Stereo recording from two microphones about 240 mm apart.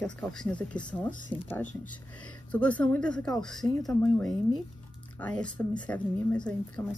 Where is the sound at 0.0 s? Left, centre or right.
Centre.